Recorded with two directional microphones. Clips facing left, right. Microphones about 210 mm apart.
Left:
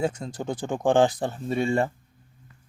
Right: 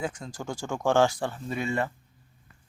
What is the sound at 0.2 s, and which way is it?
Speech, 30° left (ahead or behind).